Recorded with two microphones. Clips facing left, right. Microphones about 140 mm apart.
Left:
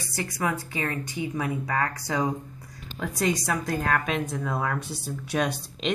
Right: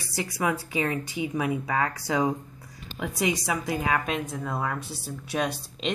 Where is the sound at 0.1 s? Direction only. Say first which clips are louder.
Right 1 dB; 10° right (ahead or behind).